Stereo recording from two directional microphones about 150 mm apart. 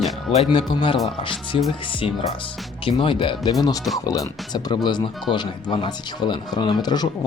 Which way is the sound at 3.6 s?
25° left (ahead or behind).